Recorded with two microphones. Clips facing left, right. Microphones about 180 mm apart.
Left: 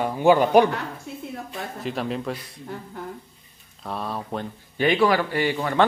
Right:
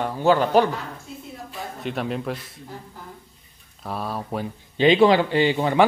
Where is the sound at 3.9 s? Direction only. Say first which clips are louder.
Right 1 dB; centre (ahead or behind).